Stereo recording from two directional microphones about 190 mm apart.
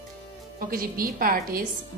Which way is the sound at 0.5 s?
50° right (ahead or behind).